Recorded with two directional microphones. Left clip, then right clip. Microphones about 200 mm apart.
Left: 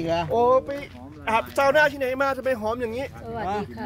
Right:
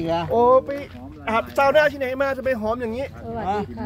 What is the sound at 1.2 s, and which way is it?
Speech, 15° left (ahead or behind).